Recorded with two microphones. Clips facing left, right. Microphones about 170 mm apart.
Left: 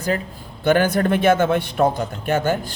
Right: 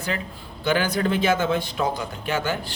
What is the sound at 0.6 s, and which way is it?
A man's voice, 50° left (ahead or behind).